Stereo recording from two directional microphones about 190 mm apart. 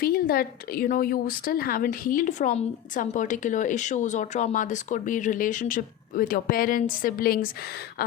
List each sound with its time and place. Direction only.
0.0 s a woman's voice: 50° left (ahead or behind)